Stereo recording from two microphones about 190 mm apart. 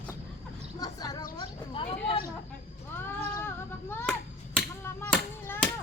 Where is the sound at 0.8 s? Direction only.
20° left (ahead or behind).